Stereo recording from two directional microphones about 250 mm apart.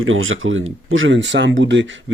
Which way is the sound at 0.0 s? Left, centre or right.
Right.